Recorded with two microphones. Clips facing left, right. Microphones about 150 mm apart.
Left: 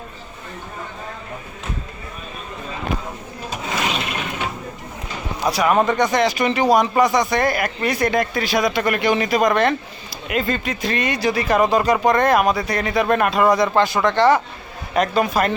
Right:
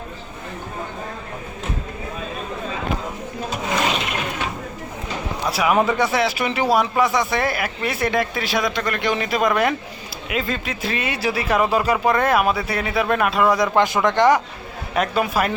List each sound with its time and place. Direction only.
5.5 s speech: 5° right (ahead or behind)
13.6 s speech: 15° right (ahead or behind)